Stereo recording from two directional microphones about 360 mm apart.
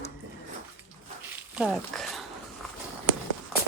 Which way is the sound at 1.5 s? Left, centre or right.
Centre.